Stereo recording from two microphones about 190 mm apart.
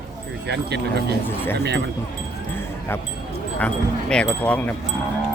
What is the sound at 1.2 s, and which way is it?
Speech, 10° left (ahead or behind).